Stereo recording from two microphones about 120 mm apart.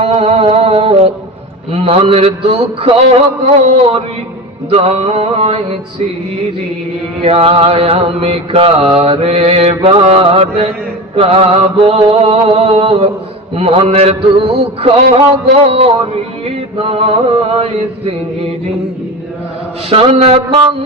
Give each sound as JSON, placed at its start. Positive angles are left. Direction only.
{"t": 0.0, "sound": "a sound", "side_deg": -55}
{"t": 1.7, "sound": "a man's voice", "side_deg": -55}
{"t": 7.3, "sound": "mantra", "side_deg": -55}
{"t": 13.6, "sound": "a man's voice", "side_deg": -55}
{"t": 19.9, "sound": "mantra", "side_deg": -55}